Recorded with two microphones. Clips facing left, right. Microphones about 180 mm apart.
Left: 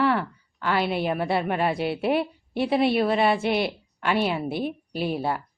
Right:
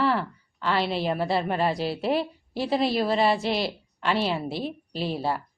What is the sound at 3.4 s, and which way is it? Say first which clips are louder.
Speech: left 2 dB; 30° right (ahead or behind).